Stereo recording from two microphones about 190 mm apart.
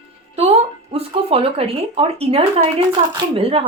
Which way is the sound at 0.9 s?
30° right (ahead or behind).